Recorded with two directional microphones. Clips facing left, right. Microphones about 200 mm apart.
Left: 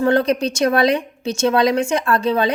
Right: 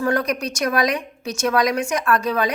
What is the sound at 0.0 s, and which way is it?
Speech, 25° left (ahead or behind).